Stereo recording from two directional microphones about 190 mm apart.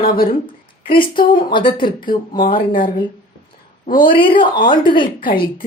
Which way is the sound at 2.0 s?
50° left (ahead or behind).